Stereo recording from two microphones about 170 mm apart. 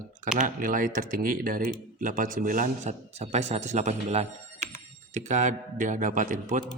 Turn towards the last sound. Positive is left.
turn(degrees=-50)  # may be behind; listen again after turning